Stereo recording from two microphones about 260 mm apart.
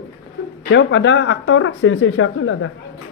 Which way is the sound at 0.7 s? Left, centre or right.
Left.